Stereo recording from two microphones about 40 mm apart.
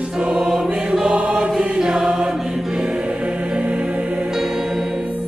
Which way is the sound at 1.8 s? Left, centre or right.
Centre.